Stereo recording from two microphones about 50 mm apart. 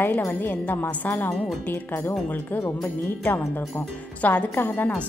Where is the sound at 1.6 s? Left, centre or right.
Left.